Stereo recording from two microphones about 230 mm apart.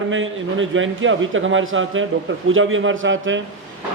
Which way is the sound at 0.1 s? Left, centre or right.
Right.